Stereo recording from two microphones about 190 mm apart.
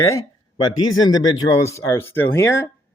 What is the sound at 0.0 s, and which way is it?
Speech, 15° left (ahead or behind).